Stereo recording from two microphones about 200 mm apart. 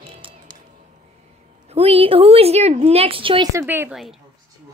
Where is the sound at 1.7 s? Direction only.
30° right (ahead or behind).